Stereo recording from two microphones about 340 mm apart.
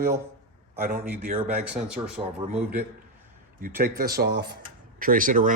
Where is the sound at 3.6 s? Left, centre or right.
Right.